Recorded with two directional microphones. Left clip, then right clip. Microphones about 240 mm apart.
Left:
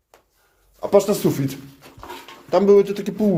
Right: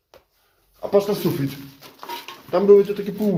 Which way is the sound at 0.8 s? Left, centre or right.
Left.